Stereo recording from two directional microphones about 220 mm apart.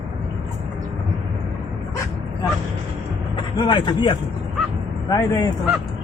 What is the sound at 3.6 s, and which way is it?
Speech, 20° left (ahead or behind).